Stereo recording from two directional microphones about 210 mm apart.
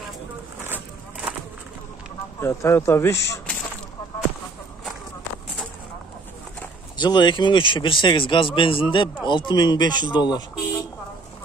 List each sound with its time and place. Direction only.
2.4 s speech: 15° left (ahead or behind)
7.0 s speech: 20° left (ahead or behind)